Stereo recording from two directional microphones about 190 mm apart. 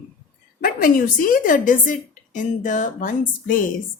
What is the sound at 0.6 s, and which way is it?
A woman's voice, 45° left (ahead or behind).